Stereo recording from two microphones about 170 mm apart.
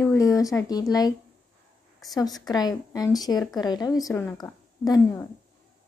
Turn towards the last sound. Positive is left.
turn(degrees=20)  # may be behind; listen again after turning